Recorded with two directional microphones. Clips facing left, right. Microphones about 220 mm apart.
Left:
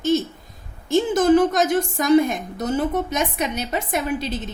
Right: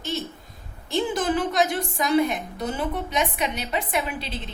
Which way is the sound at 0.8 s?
45° left (ahead or behind).